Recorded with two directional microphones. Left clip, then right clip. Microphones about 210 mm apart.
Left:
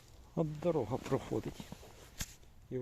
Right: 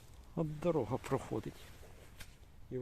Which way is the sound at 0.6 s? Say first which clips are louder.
Right 1 dB; centre (ahead or behind).